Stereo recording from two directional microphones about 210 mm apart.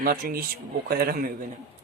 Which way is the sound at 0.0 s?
45° right (ahead or behind).